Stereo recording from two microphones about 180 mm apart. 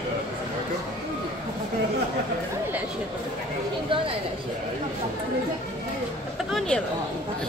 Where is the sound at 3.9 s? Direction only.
30° right (ahead or behind).